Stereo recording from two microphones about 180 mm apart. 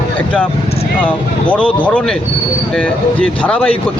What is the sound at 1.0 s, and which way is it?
Speech, 10° left (ahead or behind).